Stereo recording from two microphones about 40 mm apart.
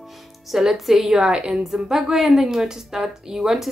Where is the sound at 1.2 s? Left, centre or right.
Right.